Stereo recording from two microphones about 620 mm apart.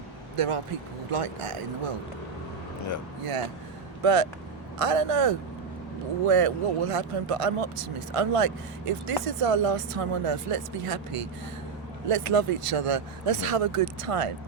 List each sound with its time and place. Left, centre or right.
0.3 s speech: right
4.0 s speech: right